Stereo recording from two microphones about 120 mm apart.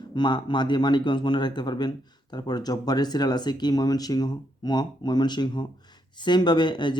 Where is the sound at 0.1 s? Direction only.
40° left (ahead or behind).